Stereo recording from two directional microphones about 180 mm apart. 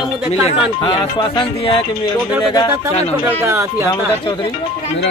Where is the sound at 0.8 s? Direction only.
25° left (ahead or behind).